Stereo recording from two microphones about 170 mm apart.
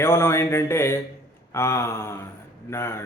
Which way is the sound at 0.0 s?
15° left (ahead or behind).